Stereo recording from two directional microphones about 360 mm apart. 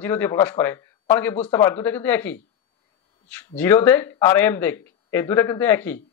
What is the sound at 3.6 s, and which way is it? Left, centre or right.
Speech, centre.